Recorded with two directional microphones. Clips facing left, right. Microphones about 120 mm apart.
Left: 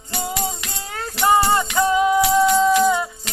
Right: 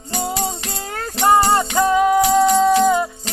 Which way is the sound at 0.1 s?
35° right (ahead or behind).